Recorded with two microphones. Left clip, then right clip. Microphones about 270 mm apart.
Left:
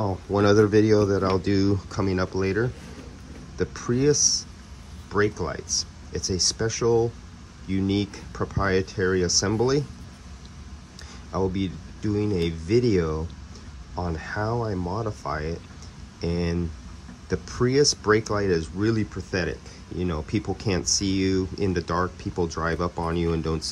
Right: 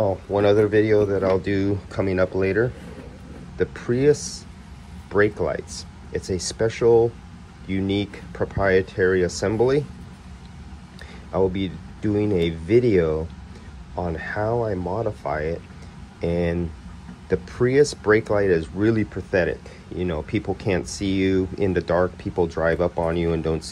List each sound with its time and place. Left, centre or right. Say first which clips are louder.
0.0 s speech: right 3 dB; centre
11.3 s speech: right 5 dB; centre